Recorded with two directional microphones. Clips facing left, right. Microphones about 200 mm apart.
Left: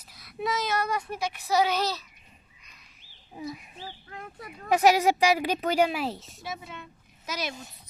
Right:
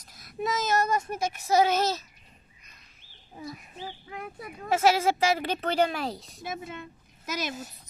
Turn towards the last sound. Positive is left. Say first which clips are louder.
# right 1 dB
turn(degrees=-50)  # may be behind; listen again after turning